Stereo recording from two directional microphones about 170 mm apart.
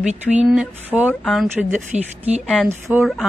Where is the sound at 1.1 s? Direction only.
5° left (ahead or behind).